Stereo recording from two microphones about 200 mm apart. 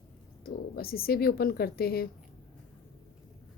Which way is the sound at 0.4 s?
50° left (ahead or behind).